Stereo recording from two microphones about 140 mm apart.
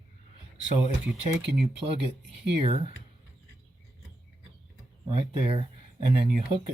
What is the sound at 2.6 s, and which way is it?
Speech, 40° right (ahead or behind).